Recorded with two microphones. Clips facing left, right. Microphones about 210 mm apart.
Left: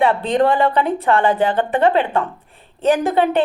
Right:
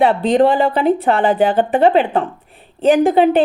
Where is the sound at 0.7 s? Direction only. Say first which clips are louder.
Right 2 dB; 30° right (ahead or behind).